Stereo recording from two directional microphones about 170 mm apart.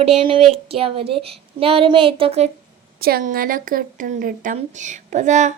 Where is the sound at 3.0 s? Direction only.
60° right (ahead or behind); by 5.5 s 45° right (ahead or behind).